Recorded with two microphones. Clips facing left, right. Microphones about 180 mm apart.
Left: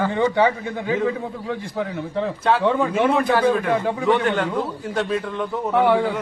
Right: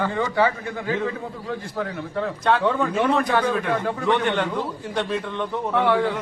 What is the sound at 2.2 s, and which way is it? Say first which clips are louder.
Speech: left 1 dB; 5° left (ahead or behind).